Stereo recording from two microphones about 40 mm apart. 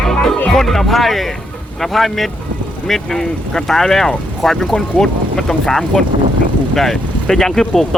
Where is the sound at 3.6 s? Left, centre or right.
Centre.